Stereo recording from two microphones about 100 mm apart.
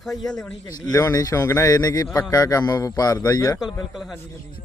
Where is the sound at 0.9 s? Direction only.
35° left (ahead or behind).